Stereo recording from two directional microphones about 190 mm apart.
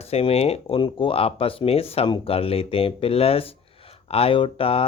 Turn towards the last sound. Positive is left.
turn(degrees=30)  # may be behind; listen again after turning